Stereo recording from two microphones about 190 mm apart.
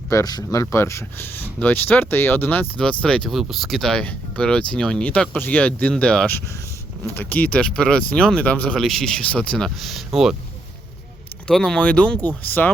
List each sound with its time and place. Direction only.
0.1 s speech: 20° left (ahead or behind); by 10.3 s centre (ahead or behind)
11.4 s speech: 5° left (ahead or behind)